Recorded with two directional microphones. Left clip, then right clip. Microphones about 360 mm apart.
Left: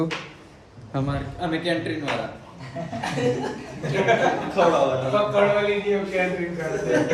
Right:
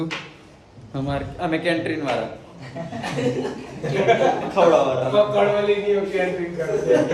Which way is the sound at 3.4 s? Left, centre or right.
Centre.